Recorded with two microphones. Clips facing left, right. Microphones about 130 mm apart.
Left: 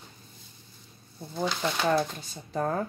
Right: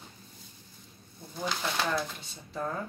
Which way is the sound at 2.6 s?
50° left (ahead or behind).